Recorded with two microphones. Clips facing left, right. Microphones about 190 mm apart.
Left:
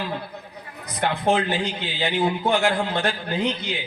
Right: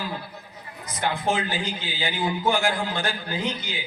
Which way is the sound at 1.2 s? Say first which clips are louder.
Left 7 dB; 60° left (ahead or behind).